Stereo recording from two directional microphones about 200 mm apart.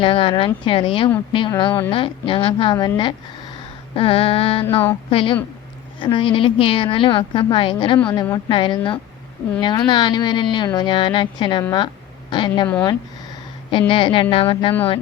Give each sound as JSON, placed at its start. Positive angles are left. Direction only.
{"t": 0.0, "sound": "speech", "side_deg": 25}
{"t": 12.6, "sound": "speech", "side_deg": 10}
{"t": 13.7, "sound": "speech", "side_deg": 25}